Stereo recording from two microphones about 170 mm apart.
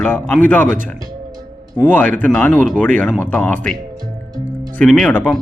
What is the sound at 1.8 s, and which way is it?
Speech, 10° left (ahead or behind).